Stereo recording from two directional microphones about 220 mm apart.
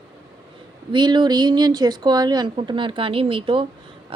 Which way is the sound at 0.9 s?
20° right (ahead or behind).